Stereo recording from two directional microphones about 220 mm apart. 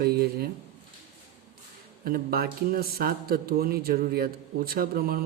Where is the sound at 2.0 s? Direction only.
40° right (ahead or behind).